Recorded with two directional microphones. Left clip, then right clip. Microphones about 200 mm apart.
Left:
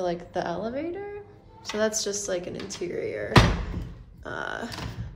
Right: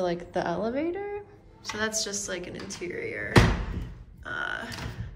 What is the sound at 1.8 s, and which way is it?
A woman's voice, 20° left (ahead or behind).